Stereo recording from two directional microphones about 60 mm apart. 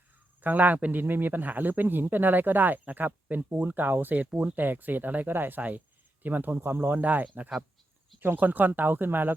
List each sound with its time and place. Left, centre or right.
0.4 s speech: right